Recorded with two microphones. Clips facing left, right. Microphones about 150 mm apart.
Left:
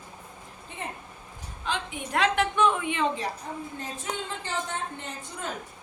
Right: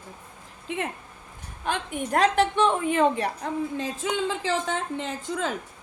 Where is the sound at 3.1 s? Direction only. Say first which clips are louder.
Right 5 dB; 70° right (ahead or behind).